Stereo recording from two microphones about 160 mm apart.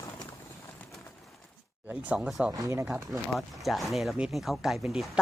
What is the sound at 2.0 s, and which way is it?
Speech, 5° right (ahead or behind).